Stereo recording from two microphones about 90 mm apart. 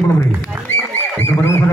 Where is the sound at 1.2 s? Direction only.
25° left (ahead or behind).